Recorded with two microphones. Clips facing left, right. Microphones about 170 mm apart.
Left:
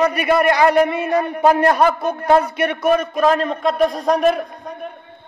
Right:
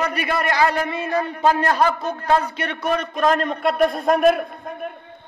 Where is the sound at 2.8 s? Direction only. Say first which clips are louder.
Left 3 dB; 5° left (ahead or behind).